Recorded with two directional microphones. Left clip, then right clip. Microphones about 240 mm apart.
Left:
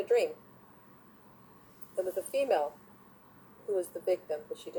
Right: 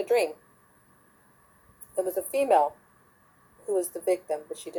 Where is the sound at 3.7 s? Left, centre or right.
Right.